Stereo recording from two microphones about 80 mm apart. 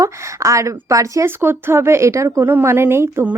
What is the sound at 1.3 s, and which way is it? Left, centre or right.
Speech, right.